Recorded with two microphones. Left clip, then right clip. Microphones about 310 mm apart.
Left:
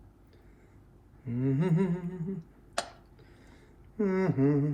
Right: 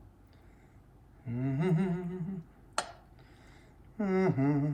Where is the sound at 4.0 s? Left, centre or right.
Centre.